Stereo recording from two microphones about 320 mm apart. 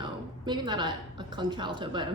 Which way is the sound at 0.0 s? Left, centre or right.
Centre.